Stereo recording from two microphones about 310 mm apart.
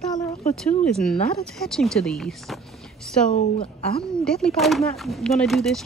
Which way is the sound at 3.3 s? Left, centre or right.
Centre.